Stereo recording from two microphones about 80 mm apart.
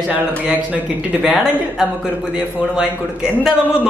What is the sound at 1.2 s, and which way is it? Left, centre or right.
A man's voice, centre.